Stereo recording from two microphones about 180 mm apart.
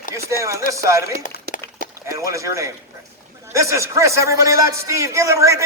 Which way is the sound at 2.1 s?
15° right (ahead or behind).